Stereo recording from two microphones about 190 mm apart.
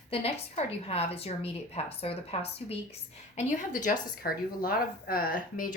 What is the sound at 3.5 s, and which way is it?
Speech, 40° left (ahead or behind).